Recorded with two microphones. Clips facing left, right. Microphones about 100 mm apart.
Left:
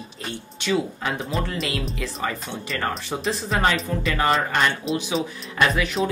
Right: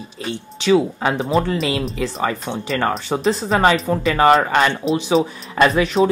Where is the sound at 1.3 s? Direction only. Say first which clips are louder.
Right 9 dB; 35° right (ahead or behind).